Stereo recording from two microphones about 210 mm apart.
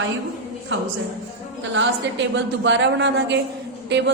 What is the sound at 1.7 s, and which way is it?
A woman's voice, 60° right (ahead or behind).